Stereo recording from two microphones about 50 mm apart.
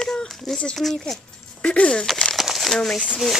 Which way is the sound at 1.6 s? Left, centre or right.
Left.